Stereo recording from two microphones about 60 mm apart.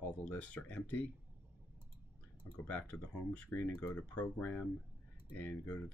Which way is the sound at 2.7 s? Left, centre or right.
Left.